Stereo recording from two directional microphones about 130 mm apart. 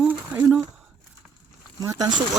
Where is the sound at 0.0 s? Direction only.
15° right (ahead or behind).